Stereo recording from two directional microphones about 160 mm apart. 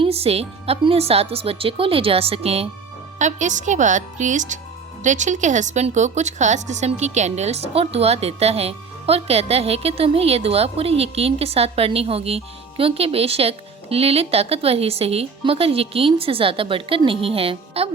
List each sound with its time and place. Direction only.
0.0 s a woman's voice: 40° right (ahead or behind)
3.2 s a woman's voice: 50° right (ahead or behind)